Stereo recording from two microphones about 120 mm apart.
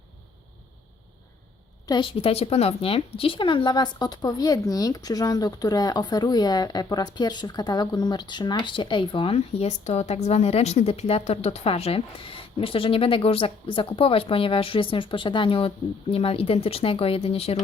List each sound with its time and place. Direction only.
1.9 s speech: 45° left (ahead or behind)